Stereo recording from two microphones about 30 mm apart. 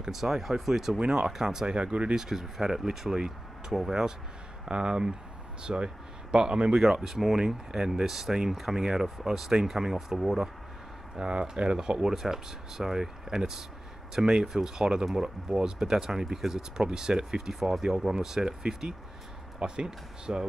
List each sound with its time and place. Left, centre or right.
0.1 s speech: centre
0.9 s speech: right
1.7 s speech: right
2.1 s speech: centre
4.6 s speech: right
6.8 s speech: centre
9.9 s speech: centre
11.1 s speech: right
19.6 s speech: right